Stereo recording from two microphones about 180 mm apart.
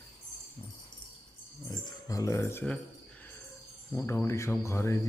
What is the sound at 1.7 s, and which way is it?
Speech, 20° left (ahead or behind).